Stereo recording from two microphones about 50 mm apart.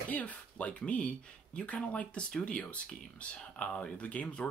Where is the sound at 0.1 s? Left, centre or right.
Left.